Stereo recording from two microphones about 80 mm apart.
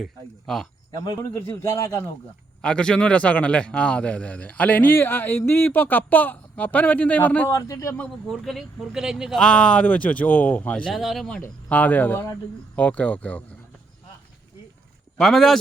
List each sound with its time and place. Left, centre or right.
0.0 s speech: centre
0.9 s speech: left
1.3 s a man's voice: left
2.6 s a man's voice: centre
7.5 s a man's voice: left
8.3 s speech: centre
8.9 s speech: centre
9.4 s a man's voice: centre
10.9 s speech: centre
11.3 s a man's voice: centre
15.2 s speech: centre